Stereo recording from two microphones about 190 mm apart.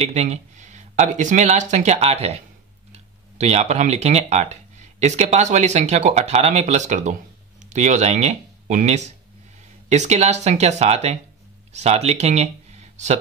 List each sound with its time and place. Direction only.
0.0 s speech: 35° right (ahead or behind)